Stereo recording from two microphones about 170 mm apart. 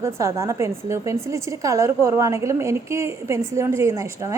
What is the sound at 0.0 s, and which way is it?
A woman's voice, 15° right (ahead or behind).